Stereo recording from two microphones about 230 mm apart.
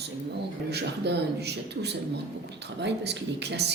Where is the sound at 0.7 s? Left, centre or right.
Right.